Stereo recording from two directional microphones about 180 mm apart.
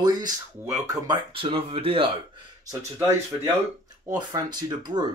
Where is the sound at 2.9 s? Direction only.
15° right (ahead or behind).